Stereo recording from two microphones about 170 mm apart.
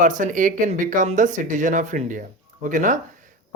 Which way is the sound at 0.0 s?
50° right (ahead or behind).